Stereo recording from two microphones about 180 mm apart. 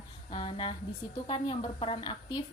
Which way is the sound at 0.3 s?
30° left (ahead or behind).